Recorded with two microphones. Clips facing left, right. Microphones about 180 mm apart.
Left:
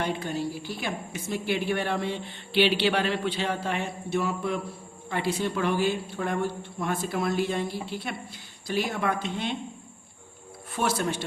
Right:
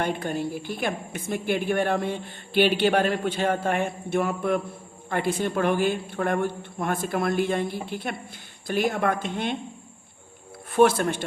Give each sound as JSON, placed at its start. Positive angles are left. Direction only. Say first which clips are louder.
{"t": 0.0, "sound": "a woman's voice", "louder": "right 2 dB", "side_deg": -50}
{"t": 10.7, "sound": "a woman's voice", "louder": "right 8 dB", "side_deg": -55}